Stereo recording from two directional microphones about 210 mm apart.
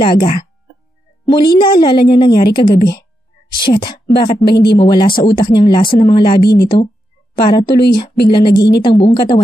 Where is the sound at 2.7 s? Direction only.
50° left (ahead or behind).